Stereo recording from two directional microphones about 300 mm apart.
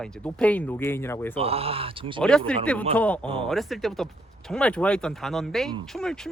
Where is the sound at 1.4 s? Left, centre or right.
Centre.